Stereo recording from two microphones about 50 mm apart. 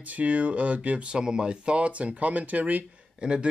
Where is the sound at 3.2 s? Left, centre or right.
Centre.